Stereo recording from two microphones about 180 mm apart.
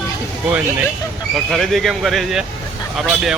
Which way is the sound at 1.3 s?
Centre (ahead or behind).